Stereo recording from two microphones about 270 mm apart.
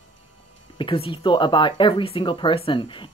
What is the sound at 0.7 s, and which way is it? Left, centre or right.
Speech, centre.